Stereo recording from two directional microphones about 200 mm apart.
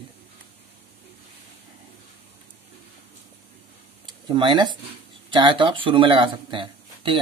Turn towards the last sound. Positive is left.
turn(degrees=-25)  # may be behind; listen again after turning